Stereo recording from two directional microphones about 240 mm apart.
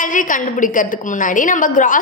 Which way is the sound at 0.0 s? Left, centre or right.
Left.